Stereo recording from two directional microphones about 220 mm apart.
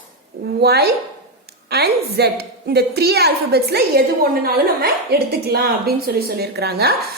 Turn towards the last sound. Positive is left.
turn(degrees=-45)  # may be behind; listen again after turning